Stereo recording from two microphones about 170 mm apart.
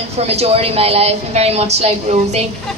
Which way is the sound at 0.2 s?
35° right (ahead or behind).